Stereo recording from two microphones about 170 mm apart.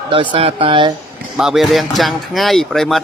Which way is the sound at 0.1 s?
30° right (ahead or behind).